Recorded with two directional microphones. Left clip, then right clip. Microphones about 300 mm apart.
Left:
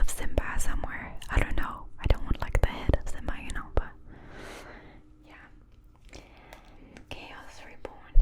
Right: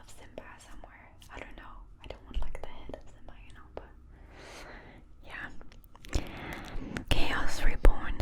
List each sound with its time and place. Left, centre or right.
0.0 s whispering: left
4.6 s a sound: centre
5.3 s whispering: right
6.1 s whispering: right